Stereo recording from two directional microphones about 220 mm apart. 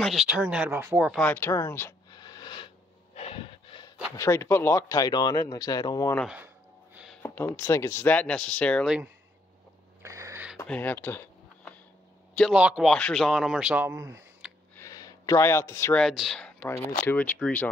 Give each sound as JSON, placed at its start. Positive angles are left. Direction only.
{"t": 0.0, "sound": "a man's voice", "side_deg": 0}
{"t": 1.2, "sound": "a sound", "side_deg": 10}
{"t": 3.2, "sound": "breathing", "side_deg": 25}
{"t": 4.2, "sound": "speech", "side_deg": 10}
{"t": 6.1, "sound": "a man's voice", "side_deg": -5}
{"t": 7.2, "sound": "speech", "side_deg": 10}
{"t": 10.0, "sound": "a sound", "side_deg": -15}
{"t": 10.6, "sound": "a sound", "side_deg": 10}
{"t": 12.4, "sound": "a man's voice", "side_deg": 0}
{"t": 14.8, "sound": "speech", "side_deg": 15}